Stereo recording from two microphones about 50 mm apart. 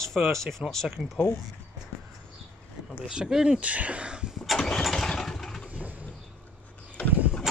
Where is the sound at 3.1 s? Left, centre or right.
Centre.